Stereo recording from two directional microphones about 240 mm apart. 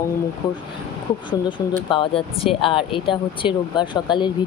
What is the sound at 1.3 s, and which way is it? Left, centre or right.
Speech, centre.